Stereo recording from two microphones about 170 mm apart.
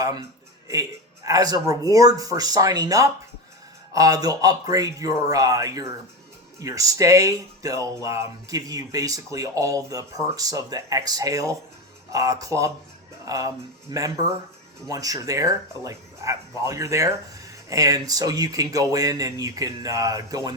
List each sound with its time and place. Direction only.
0.7 s speech: 20° right (ahead or behind)